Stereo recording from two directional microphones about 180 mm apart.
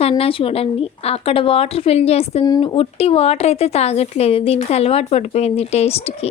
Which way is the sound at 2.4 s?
25° left (ahead or behind).